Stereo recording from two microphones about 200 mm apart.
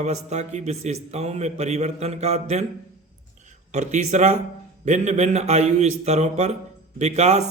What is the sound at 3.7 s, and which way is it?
A man's voice, 35° right (ahead or behind).